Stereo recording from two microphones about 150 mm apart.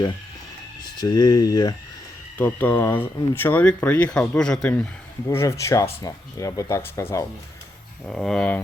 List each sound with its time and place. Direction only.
0.9 s speech: 25° left (ahead or behind)
2.4 s speech: 10° left (ahead or behind)
5.3 s speech: 20° left (ahead or behind)
8.0 s speech: 5° left (ahead or behind)